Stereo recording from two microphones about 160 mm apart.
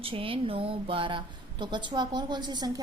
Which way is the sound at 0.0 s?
35° right (ahead or behind).